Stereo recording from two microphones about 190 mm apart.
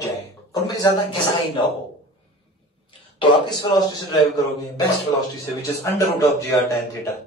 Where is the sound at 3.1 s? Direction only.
25° left (ahead or behind).